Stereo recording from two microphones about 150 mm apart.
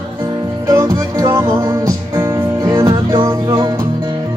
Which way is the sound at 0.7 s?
25° right (ahead or behind).